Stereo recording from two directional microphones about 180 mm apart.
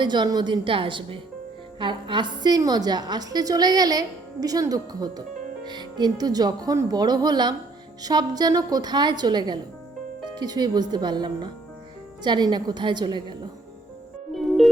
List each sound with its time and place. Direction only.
0.0 s a woman's voice: 25° right (ahead or behind)
14.3 s music: centre (ahead or behind)